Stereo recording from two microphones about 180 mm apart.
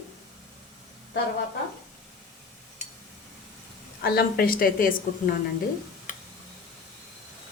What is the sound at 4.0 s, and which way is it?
A woman's voice, 60° left (ahead or behind).